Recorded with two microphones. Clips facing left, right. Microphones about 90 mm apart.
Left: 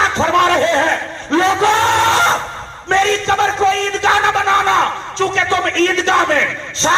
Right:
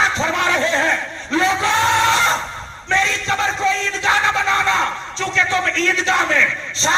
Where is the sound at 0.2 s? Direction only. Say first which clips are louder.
Left 6 dB; 45° left (ahead or behind).